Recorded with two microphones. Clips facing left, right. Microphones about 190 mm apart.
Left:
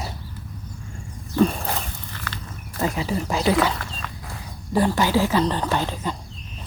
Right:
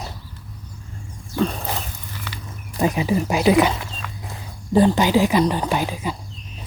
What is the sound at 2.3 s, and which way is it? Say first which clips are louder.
Speech: even; 15° right (ahead or behind).